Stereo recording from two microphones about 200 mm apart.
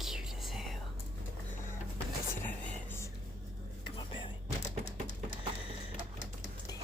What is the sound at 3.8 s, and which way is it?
Whispering, 25° left (ahead or behind).